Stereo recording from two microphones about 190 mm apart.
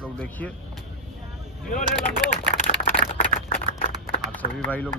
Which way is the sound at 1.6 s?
45° left (ahead or behind).